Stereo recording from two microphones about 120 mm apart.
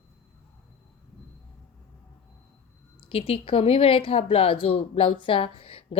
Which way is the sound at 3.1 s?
55° left (ahead or behind).